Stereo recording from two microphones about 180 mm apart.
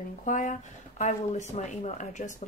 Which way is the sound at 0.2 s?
45° left (ahead or behind).